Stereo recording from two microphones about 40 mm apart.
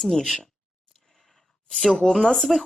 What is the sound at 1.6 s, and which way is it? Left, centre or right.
Speech, centre.